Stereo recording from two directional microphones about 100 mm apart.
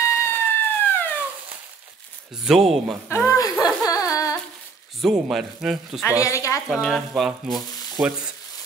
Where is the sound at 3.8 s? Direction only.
35° left (ahead or behind).